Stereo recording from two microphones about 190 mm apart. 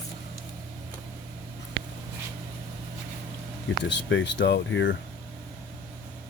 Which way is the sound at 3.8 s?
70° left (ahead or behind).